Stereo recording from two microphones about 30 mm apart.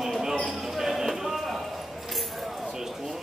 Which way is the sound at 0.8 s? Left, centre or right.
Centre.